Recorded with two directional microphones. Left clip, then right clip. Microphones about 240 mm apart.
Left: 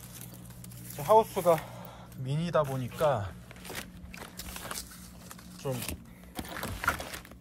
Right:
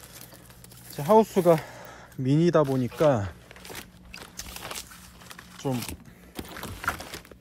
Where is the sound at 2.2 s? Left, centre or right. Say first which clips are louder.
Right 7 dB; right.